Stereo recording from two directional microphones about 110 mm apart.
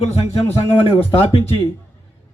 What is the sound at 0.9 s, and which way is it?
Speech, 55° left (ahead or behind).